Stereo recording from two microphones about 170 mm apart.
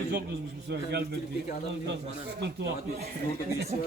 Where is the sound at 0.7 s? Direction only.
75° right (ahead or behind).